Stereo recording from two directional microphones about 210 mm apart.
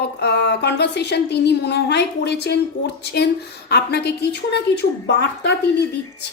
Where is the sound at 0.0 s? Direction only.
50° left (ahead or behind).